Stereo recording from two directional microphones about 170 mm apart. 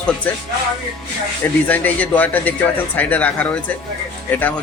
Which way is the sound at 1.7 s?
10° left (ahead or behind).